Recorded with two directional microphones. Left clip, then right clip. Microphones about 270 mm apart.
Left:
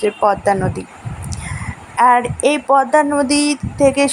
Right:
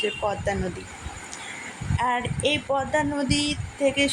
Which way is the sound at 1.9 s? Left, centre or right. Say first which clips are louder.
Left 13 dB; left.